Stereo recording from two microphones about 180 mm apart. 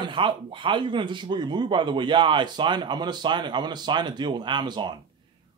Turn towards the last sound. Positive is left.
turn(degrees=-25)  # may be behind; listen again after turning